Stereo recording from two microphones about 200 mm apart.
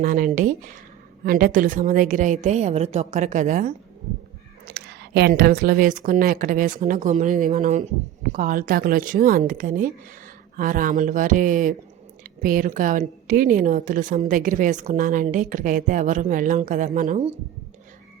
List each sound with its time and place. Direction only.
0.0 s a woman's voice: 40° right (ahead or behind)
4.6 s a woman's voice: 55° right (ahead or behind); by 17.3 s 35° right (ahead or behind)